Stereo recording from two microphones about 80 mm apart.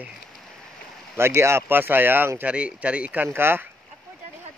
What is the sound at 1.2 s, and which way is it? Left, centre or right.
Speech, right.